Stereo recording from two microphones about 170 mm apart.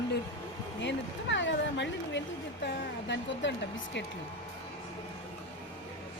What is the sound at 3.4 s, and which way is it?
Speech, 90° left.